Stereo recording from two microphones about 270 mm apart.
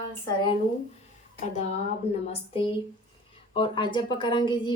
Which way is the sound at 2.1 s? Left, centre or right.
Centre.